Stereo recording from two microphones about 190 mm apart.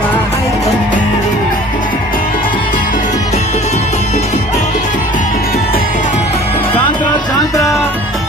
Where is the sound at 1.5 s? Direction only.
45° left (ahead or behind); by 7.4 s 20° left (ahead or behind).